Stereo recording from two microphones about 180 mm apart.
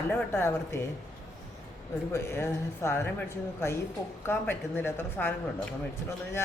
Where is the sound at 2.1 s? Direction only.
15° left (ahead or behind).